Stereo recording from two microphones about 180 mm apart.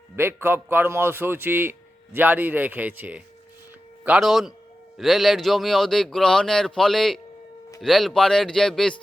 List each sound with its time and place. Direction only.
0.2 s a man's voice: 10° right (ahead or behind)